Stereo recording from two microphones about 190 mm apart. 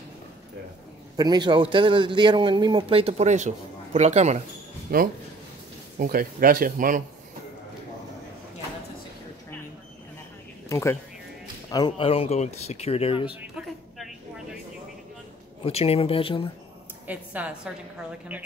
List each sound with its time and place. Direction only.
1.1 s a man's voice: 20° right (ahead or behind); by 4.4 s 35° right (ahead or behind)
4.9 s speech: 50° right (ahead or behind)
10.7 s speech: 15° left (ahead or behind)
11.7 s speech: 25° left (ahead or behind)
13.4 s a sound: centre (ahead or behind)
15.6 s speech: 30° left (ahead or behind)
17.1 s a woman's voice: 10° right (ahead or behind)